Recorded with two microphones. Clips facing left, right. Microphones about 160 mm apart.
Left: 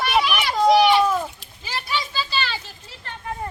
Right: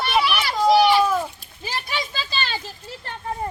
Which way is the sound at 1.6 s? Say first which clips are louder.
Left 1 dB; 50° right (ahead or behind).